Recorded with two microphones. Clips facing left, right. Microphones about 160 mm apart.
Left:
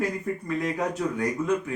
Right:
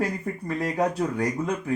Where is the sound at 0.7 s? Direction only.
30° right (ahead or behind).